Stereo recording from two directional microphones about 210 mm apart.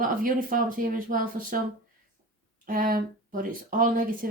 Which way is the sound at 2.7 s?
45° right (ahead or behind).